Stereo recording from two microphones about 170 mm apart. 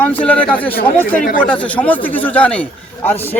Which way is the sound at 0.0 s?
10° left (ahead or behind).